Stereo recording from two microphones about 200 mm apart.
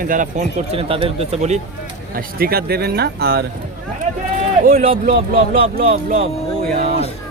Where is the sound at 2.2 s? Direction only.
50° right (ahead or behind).